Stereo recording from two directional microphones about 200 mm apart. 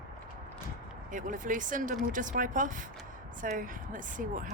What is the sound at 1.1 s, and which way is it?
Speech, 40° right (ahead or behind).